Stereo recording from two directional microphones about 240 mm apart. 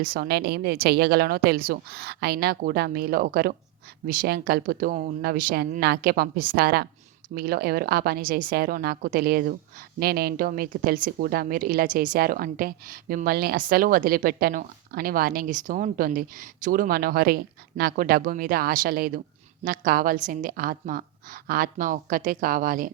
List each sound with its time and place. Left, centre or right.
0.0 s speech: right